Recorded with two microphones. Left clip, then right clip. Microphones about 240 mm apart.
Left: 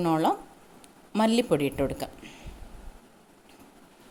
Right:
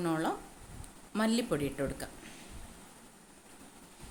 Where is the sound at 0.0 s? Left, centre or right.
Left.